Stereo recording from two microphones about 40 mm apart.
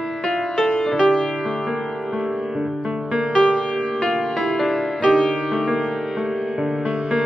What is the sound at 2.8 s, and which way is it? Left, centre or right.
Music, centre.